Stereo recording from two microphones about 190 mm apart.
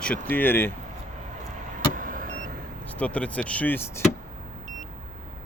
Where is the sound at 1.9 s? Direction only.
45° right (ahead or behind).